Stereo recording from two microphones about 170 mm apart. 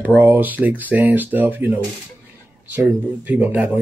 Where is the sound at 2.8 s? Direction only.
10° right (ahead or behind).